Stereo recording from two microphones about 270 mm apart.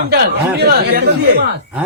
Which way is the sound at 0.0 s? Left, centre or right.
Right.